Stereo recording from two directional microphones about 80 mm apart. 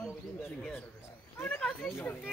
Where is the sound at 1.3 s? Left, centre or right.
Left.